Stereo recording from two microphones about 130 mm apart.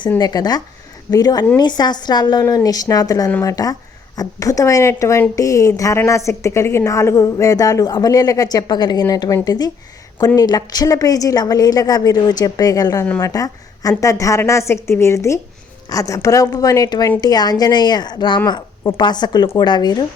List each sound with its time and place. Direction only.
0.2 s a woman's voice: 30° left (ahead or behind)